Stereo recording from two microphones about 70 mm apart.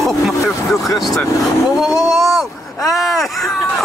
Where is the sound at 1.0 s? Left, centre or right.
Centre.